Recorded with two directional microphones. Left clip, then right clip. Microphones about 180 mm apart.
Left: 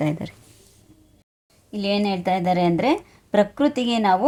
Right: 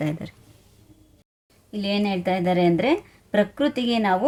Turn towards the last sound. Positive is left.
turn(degrees=20)  # may be behind; listen again after turning